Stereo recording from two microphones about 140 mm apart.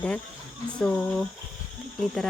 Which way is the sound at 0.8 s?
5° left (ahead or behind).